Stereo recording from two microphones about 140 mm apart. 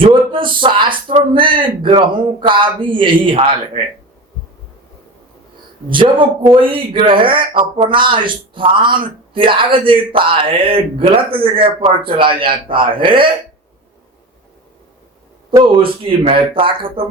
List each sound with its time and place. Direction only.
0.0 s speech: 35° right (ahead or behind)
5.9 s speech: 35° right (ahead or behind)
15.5 s speech: 40° right (ahead or behind)